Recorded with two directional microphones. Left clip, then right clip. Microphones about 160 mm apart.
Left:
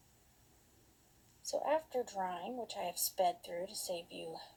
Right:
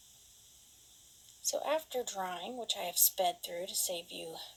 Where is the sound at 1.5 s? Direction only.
25° right (ahead or behind).